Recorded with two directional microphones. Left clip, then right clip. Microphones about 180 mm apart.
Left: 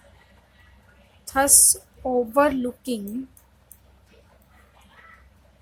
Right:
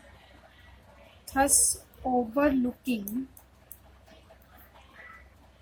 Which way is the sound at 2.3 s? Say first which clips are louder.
Left 8 dB; 40° left (ahead or behind).